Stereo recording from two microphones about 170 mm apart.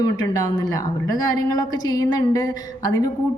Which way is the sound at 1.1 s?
20° left (ahead or behind).